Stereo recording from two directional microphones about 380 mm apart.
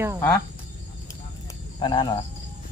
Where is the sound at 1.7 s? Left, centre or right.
Centre.